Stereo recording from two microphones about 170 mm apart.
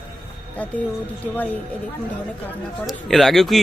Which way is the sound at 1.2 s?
10° left (ahead or behind).